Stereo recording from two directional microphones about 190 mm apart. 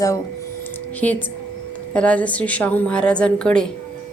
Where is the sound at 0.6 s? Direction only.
10° left (ahead or behind).